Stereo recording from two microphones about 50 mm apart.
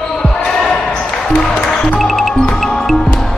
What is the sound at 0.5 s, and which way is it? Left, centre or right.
Basketball bounce, centre.